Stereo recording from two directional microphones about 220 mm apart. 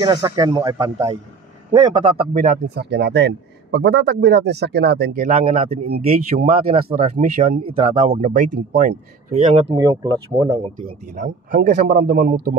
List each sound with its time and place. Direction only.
0.0 s speech: 20° right (ahead or behind)
1.9 s speech: 35° right (ahead or behind)
2.8 s speech: 50° right (ahead or behind); by 9.8 s 30° right (ahead or behind)
9.8 s speech: 20° right (ahead or behind)
10.9 s speech: 35° right (ahead or behind)